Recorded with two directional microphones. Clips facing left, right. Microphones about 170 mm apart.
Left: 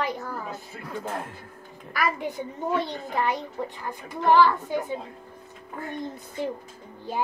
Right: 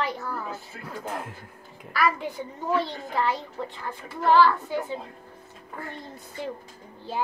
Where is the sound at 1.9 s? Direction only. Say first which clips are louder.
Right 2 dB; 15° left (ahead or behind).